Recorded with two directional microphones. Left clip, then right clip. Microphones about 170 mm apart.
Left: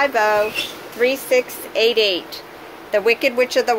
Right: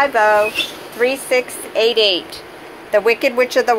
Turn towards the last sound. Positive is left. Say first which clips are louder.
# right 2 dB
turn(degrees=15)  # may be behind; listen again after turning